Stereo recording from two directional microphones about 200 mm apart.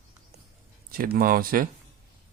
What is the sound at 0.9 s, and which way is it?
Speech, 45° right (ahead or behind).